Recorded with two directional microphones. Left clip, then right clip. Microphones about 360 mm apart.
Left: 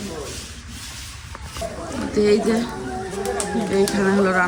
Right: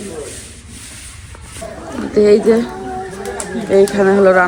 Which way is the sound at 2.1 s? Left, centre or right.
Centre.